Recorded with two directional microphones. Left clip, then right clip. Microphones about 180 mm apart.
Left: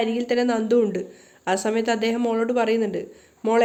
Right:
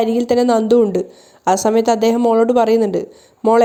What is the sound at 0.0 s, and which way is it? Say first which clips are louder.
Speech: right 7 dB; 35° right (ahead or behind).